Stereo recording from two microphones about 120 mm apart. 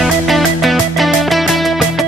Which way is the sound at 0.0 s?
Centre (ahead or behind).